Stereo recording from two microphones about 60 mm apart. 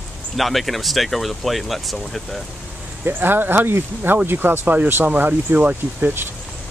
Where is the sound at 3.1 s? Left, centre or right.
Right.